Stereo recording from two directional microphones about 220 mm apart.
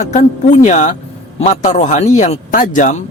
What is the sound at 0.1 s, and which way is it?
A man's voice, 30° left (ahead or behind).